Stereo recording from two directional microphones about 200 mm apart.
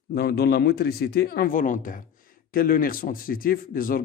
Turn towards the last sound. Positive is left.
turn(degrees=45)  # may be behind; listen again after turning